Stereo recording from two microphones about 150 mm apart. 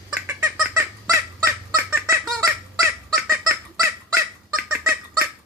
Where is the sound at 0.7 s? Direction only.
20° right (ahead or behind).